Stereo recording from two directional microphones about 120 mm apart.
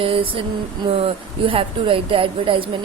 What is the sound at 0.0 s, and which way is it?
A woman's voice, 50° right (ahead or behind).